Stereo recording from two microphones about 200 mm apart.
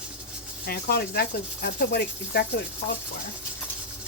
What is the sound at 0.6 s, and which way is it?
Speech, 50° left (ahead or behind).